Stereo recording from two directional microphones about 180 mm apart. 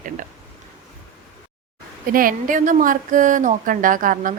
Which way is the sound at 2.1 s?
50° right (ahead or behind).